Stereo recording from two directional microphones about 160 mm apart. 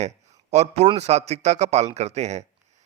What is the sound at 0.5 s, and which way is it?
A man's voice, 45° right (ahead or behind).